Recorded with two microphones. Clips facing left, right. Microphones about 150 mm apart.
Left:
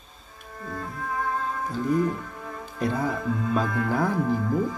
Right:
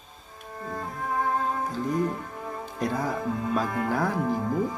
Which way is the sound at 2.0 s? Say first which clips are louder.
Left 1 dB; 25° right (ahead or behind).